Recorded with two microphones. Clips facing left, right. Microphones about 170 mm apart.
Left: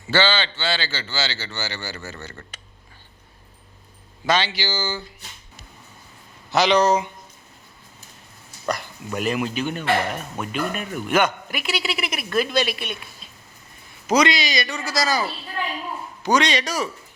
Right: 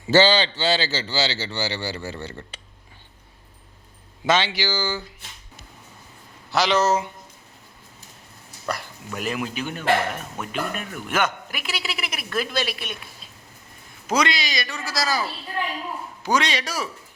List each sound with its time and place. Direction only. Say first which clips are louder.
0.1 s a man's voice: right 4 dB; 40° right (ahead or behind)
4.3 s speech: right 1 dB; 20° right (ahead or behind)
6.5 s a man's voice: left 3 dB; centre (ahead or behind)
8.7 s a man's voice: left 3 dB; 5° right (ahead or behind)
14.1 s a man's voice: left 4 dB; centre (ahead or behind)